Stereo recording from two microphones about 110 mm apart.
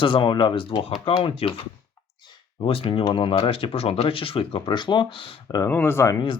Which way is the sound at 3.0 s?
50° left (ahead or behind).